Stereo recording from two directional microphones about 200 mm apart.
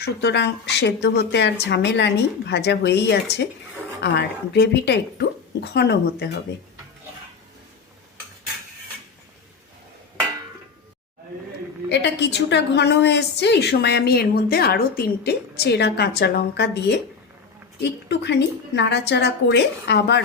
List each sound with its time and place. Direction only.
0.0 s a woman's voice: 60° left (ahead or behind)
11.9 s a woman's voice: 60° left (ahead or behind)